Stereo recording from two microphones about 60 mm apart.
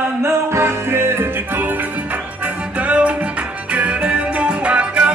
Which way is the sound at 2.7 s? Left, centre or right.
Right.